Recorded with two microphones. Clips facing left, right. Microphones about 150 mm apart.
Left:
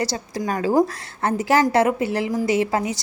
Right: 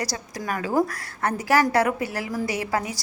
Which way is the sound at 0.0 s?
25° left (ahead or behind).